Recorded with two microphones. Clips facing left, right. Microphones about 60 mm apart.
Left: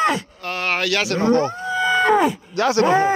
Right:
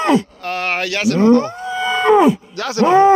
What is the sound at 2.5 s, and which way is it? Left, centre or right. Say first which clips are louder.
Speech: left 5 dB; left.